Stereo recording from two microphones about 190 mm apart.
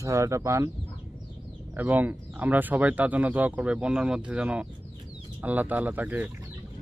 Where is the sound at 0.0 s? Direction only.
15° right (ahead or behind).